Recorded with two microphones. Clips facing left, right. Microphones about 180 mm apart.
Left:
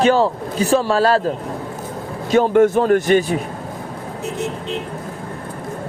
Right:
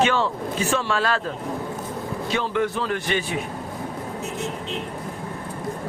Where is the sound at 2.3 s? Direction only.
50° left (ahead or behind).